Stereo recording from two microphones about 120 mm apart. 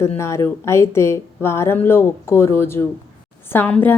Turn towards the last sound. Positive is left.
turn(degrees=15)  # may be behind; listen again after turning